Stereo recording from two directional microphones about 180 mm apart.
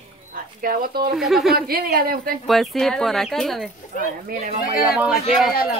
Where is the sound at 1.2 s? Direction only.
Centre (ahead or behind).